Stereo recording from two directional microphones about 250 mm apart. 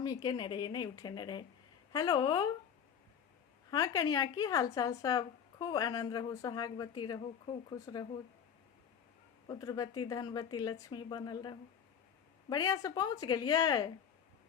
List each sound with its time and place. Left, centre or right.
0.0 s a woman's voice: centre
3.7 s a woman's voice: centre
9.5 s a woman's voice: centre